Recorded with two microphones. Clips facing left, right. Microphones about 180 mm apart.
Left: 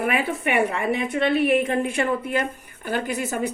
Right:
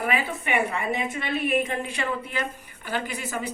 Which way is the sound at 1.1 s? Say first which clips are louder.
Left 8 dB; 60° left (ahead or behind).